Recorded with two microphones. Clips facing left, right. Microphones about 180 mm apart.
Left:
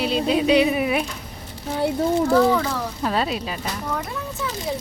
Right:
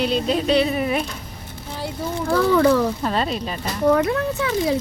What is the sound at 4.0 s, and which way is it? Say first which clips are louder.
Speech: right 9 dB; 85° right.